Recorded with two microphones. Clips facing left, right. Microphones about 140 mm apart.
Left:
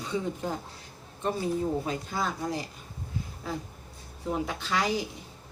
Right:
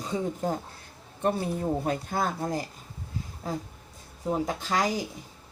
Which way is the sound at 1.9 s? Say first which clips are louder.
Right 3 dB; 50° right (ahead or behind).